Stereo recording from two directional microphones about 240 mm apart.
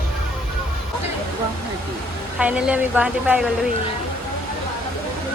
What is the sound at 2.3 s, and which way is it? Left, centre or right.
Speech, centre.